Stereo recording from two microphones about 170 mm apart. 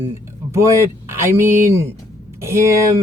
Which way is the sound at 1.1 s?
15° right (ahead or behind).